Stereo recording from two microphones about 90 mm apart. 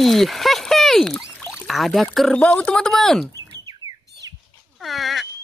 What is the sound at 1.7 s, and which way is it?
Wild animals, centre (ahead or behind).